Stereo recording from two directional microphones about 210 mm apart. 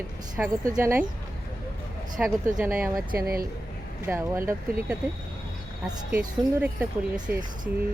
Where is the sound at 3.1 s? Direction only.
45° right (ahead or behind).